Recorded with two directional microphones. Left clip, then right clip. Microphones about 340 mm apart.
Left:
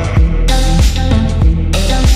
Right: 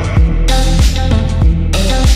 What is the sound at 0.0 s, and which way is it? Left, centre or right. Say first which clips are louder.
Music: even; centre.